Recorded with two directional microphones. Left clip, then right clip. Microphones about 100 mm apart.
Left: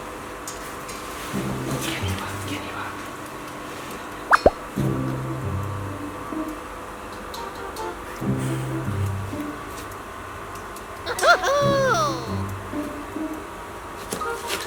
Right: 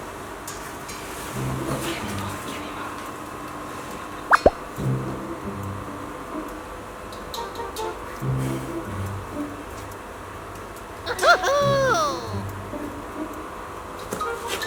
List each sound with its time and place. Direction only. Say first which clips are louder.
4.3 s plop: even; centre (ahead or behind)
11.0 s music: even; centre (ahead or behind)